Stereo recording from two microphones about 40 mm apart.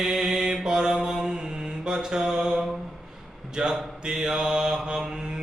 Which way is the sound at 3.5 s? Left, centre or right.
Centre.